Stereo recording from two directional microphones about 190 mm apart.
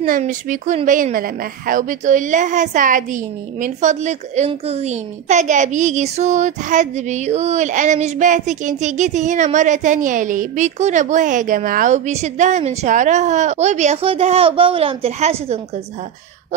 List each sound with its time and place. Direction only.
0.0 s a woman's voice: 45° right (ahead or behind)